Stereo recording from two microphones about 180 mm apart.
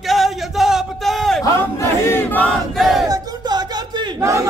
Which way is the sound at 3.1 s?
20° right (ahead or behind).